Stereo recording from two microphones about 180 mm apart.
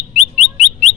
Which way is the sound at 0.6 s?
40° left (ahead or behind).